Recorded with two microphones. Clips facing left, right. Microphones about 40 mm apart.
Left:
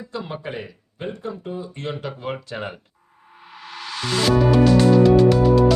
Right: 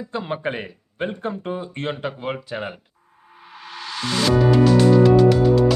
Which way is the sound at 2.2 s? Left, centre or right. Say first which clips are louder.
Even; centre.